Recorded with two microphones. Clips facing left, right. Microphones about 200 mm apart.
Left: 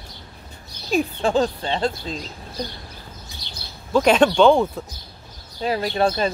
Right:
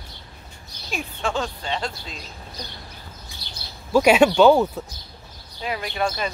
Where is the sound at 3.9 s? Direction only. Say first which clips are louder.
Even; 10° right (ahead or behind).